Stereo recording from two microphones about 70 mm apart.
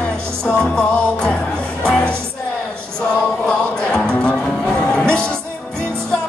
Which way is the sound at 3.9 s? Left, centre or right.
Centre.